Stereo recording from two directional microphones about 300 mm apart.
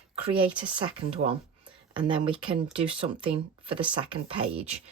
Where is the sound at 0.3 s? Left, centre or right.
Centre.